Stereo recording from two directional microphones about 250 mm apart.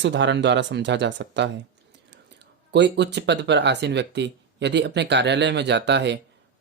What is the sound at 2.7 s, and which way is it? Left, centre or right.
Speech, right.